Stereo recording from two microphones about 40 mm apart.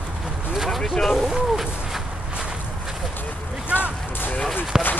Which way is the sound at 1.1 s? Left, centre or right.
Centre.